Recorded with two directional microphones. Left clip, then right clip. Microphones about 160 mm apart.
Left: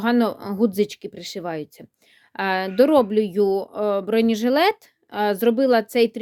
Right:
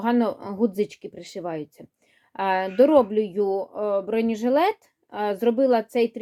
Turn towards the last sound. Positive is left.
turn(degrees=40)  # may be behind; listen again after turning